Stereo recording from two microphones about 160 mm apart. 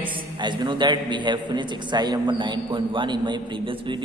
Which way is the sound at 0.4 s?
30° right (ahead or behind).